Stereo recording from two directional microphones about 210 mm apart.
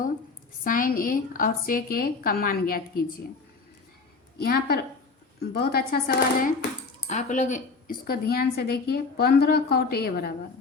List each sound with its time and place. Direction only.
0.6 s a woman's voice: 40° left (ahead or behind)
4.4 s a woman's voice: 45° left (ahead or behind)
7.1 s speech: 35° left (ahead or behind)
8.0 s a woman's voice: 45° left (ahead or behind)